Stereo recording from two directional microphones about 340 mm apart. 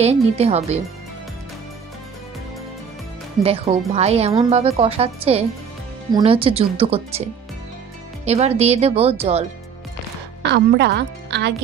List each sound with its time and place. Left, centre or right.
0.0 s a woman's voice: centre
3.4 s a woman's voice: centre
8.3 s a woman's voice: centre
10.5 s speech: right